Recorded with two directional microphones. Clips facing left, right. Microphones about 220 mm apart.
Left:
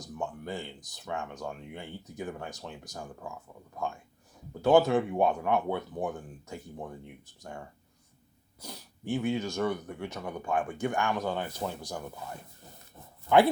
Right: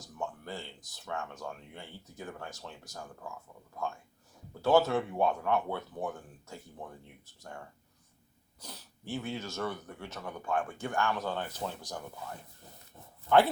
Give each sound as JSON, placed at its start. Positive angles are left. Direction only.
{"t": 0.0, "sound": "speech", "side_deg": 15}
{"t": 8.6, "sound": "speech", "side_deg": 10}